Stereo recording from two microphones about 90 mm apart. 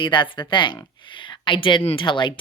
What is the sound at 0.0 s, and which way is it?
Speech, 60° left (ahead or behind).